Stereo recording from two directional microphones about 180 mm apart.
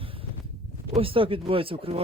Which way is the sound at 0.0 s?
30° right (ahead or behind).